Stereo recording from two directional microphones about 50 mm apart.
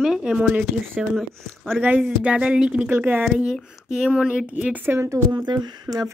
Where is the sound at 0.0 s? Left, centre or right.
Centre.